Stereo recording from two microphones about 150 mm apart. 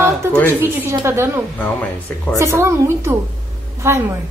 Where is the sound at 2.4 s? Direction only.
15° right (ahead or behind).